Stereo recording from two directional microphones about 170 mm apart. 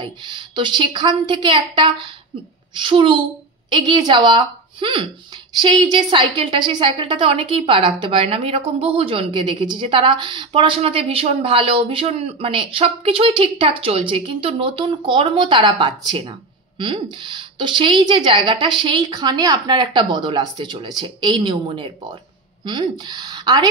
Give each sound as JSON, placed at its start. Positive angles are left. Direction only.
{"t": 0.0, "sound": "speech", "side_deg": -25}